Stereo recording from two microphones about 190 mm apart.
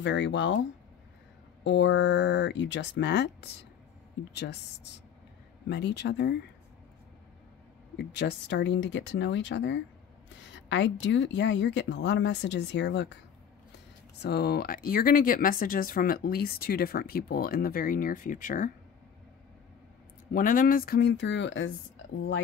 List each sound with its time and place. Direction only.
0.0 s speech: 70° left (ahead or behind)
1.6 s speech: 70° left (ahead or behind)
7.9 s speech: 65° left (ahead or behind)
14.2 s speech: 60° left (ahead or behind)
20.3 s speech: 45° left (ahead or behind); by 22.0 s 75° left (ahead or behind)